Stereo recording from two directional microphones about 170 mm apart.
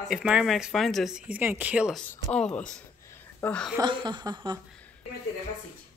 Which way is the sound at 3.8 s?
25° right (ahead or behind).